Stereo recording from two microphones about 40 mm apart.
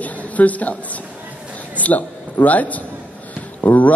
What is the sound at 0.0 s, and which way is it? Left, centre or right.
A man's voice, left.